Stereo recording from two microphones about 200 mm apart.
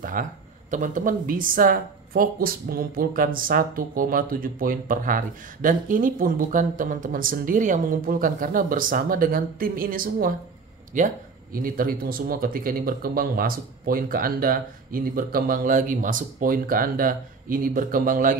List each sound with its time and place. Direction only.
0.0 s speech: 40° right (ahead or behind)